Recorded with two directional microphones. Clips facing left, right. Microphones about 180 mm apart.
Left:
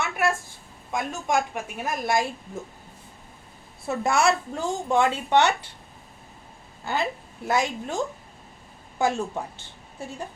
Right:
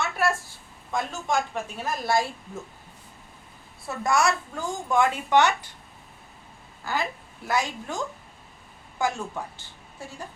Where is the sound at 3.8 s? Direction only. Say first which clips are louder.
Left 2 dB; 25° left (ahead or behind).